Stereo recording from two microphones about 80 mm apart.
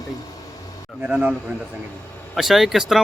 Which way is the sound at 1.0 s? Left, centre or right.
Centre.